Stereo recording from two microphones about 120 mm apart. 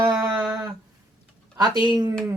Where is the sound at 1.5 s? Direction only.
35° right (ahead or behind).